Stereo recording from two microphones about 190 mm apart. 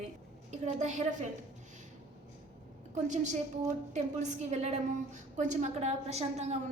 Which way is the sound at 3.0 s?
40° right (ahead or behind).